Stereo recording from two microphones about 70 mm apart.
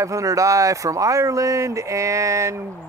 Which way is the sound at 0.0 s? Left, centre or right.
Right.